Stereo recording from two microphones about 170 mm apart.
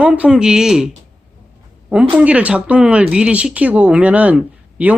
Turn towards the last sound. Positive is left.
turn(degrees=-10)  # may be behind; listen again after turning